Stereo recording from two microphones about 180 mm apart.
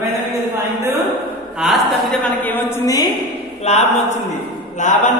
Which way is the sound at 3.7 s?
40° left (ahead or behind).